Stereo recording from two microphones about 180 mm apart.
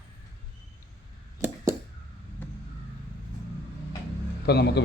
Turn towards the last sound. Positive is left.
turn(degrees=65)  # may be behind; listen again after turning